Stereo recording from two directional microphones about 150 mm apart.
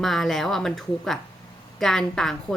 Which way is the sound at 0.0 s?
Centre (ahead or behind).